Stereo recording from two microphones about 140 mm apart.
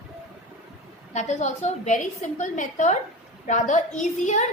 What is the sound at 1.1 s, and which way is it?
A woman's voice, 55° left (ahead or behind).